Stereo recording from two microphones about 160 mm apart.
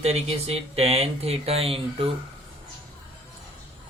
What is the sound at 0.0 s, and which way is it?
Speech, 40° right (ahead or behind).